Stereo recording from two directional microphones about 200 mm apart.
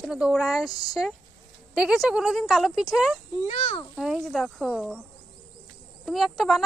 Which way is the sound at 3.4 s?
35° left (ahead or behind).